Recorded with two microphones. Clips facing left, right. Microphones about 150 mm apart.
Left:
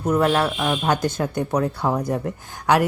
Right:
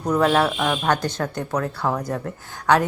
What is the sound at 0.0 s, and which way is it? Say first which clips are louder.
Speech: even; 5° left (ahead or behind).